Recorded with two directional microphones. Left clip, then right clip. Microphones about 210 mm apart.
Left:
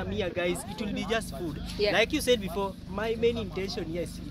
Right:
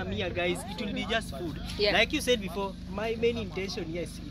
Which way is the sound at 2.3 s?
45° left (ahead or behind).